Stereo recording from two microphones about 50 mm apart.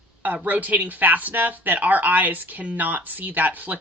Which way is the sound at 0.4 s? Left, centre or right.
Right.